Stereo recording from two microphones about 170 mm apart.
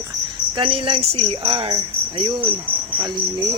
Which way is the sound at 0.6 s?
30° right (ahead or behind).